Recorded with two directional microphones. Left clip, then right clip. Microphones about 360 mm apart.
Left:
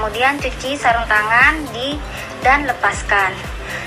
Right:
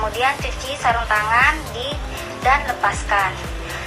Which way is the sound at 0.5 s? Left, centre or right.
Left.